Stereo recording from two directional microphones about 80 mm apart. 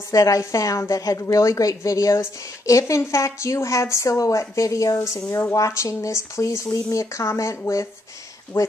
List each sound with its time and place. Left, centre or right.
0.1 s a woman's voice: left
8.5 s speech: left